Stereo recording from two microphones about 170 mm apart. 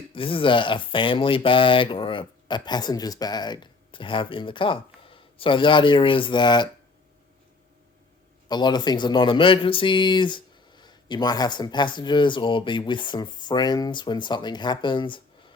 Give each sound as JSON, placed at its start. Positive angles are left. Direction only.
{"t": 0.1, "sound": "speech", "side_deg": 30}
{"t": 8.4, "sound": "speech", "side_deg": 25}